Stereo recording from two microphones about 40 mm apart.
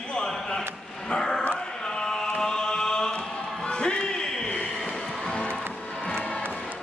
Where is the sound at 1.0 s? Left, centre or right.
Centre.